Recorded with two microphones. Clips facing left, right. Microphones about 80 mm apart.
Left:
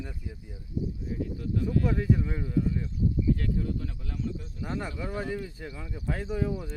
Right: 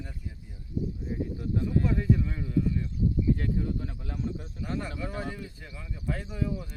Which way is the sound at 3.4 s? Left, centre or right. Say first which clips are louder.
Even; right.